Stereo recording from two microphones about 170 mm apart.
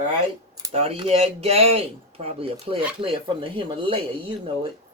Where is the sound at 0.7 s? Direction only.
35° right (ahead or behind).